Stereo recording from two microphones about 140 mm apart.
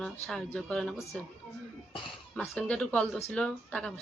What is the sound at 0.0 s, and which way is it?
Speech, 5° left (ahead or behind).